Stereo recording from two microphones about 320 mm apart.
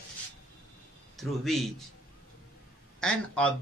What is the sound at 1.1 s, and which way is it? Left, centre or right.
Speech, centre.